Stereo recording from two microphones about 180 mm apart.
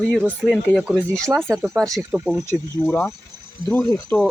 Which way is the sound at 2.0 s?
10° right (ahead or behind).